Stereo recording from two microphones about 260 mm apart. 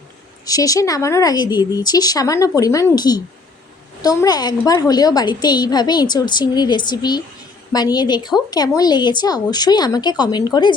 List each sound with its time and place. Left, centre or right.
0.4 s a woman's voice: centre